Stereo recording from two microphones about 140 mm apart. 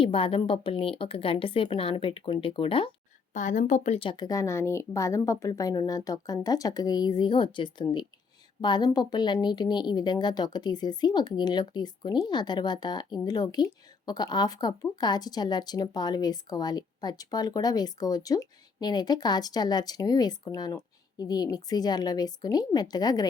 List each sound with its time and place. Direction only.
0.0 s speech: 40° left (ahead or behind)
3.3 s a woman's voice: 60° left (ahead or behind)
3.9 s a woman's voice: 35° left (ahead or behind)